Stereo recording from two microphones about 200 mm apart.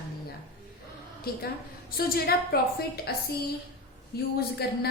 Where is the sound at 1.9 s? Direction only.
50° left (ahead or behind).